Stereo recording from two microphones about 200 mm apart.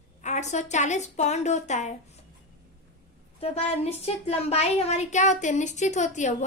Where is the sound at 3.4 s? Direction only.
30° left (ahead or behind).